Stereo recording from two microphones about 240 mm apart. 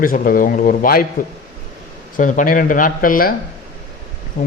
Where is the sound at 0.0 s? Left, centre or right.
Left.